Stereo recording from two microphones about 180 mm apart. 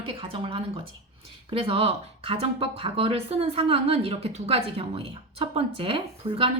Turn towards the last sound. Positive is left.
turn(degrees=-30)  # may be behind; listen again after turning